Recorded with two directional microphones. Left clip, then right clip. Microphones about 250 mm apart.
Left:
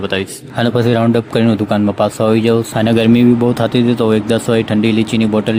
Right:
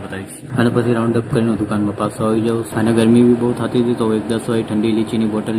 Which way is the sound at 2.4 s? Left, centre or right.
Left.